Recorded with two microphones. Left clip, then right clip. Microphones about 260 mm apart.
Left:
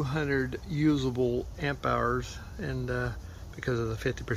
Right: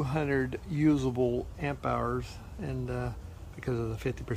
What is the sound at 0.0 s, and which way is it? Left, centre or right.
Speech, centre.